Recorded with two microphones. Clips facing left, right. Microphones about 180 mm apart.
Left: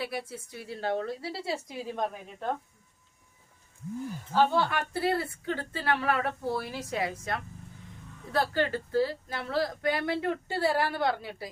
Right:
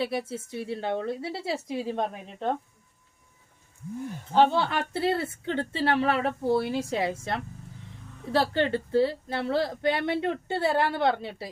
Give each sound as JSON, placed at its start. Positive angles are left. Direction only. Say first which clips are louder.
{"t": 0.0, "sound": "a woman's voice", "louder": "right 6 dB", "side_deg": -25}
{"t": 4.4, "sound": "a woman's voice", "louder": "right 3 dB", "side_deg": -25}